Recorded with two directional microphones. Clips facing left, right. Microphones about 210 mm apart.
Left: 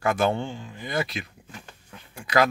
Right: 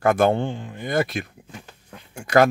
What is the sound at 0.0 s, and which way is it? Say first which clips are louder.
Speech: right 5 dB; 55° right (ahead or behind).